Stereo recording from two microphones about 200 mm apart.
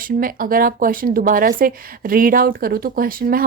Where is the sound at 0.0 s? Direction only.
45° right (ahead or behind).